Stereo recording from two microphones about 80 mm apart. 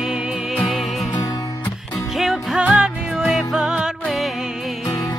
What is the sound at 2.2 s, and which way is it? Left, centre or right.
Music, centre.